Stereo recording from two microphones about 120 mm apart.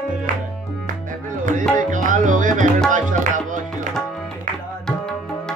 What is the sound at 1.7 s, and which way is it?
Music, 90° right.